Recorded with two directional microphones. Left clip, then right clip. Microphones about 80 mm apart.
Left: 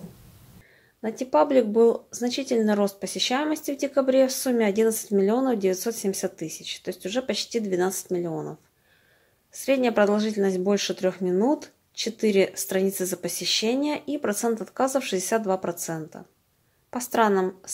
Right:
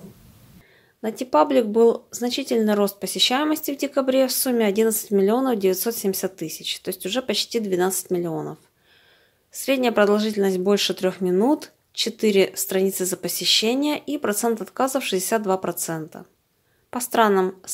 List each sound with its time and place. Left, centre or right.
1.0 s speech: right